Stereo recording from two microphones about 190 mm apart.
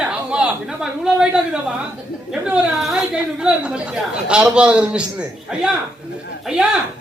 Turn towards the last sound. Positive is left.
turn(degrees=-5)  # may be behind; listen again after turning